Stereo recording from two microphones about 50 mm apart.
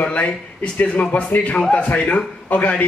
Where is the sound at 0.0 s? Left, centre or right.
Left.